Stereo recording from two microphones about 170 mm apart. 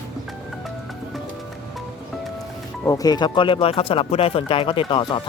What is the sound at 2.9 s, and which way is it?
Speech, 25° left (ahead or behind).